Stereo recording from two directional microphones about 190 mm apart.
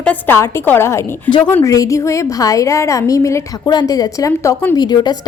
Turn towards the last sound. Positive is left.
turn(degrees=20)  # may be behind; listen again after turning